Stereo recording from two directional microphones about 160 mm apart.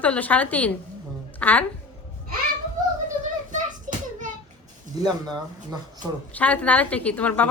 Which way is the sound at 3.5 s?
50° right (ahead or behind).